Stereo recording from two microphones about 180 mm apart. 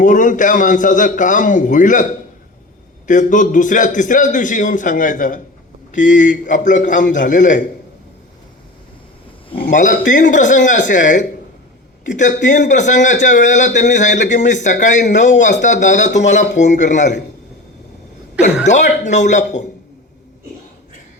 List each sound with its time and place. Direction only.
0.0 s speech: 45° left (ahead or behind)
3.1 s speech: 45° left (ahead or behind)
9.6 s speech: 45° left (ahead or behind)
18.6 s speech: 40° left (ahead or behind)